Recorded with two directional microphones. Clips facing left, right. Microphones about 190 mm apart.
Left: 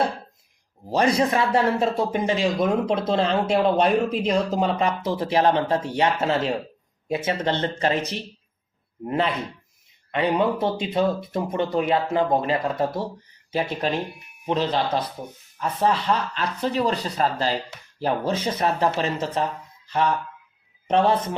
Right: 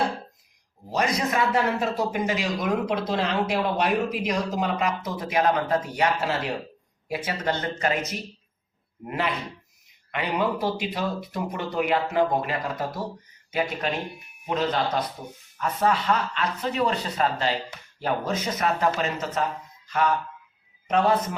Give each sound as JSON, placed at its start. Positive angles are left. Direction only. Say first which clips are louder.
{"t": 0.9, "sound": "a man's voice", "louder": "left 5 dB", "side_deg": 30}
{"t": 20.8, "sound": "a man's voice", "louder": "left 2 dB", "side_deg": 30}